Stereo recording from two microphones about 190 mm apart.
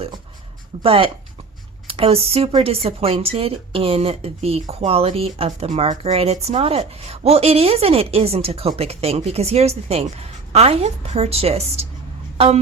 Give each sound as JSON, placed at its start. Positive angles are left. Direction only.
{"t": 0.8, "sound": "speech", "side_deg": -30}